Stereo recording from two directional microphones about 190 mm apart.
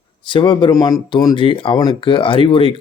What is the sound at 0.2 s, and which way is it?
Speech, 25° left (ahead or behind).